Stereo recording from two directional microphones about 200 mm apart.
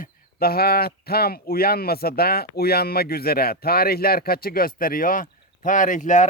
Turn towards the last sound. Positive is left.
turn(degrees=40)  # may be behind; listen again after turning